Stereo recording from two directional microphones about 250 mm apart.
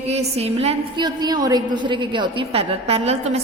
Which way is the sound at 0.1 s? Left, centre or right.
Right.